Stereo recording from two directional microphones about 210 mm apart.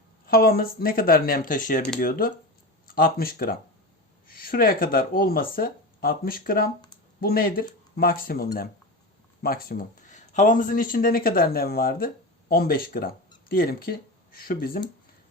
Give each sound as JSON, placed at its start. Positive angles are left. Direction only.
{"t": 0.3, "sound": "speech", "side_deg": 45}